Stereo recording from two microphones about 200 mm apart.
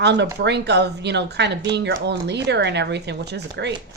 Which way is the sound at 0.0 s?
60° right (ahead or behind).